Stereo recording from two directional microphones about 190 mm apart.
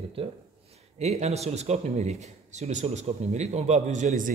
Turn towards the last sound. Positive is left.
turn(degrees=-40)  # may be behind; listen again after turning